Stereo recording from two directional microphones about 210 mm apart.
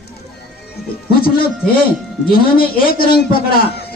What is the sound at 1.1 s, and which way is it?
A man's voice, 45° left (ahead or behind).